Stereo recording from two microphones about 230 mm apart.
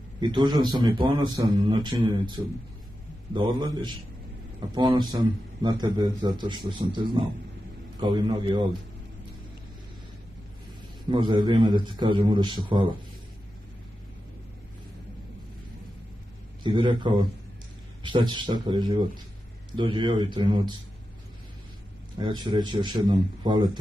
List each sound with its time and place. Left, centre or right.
0.2 s a man's voice: centre
11.1 s a man's voice: right
16.6 s a man's voice: centre
22.1 s a man's voice: centre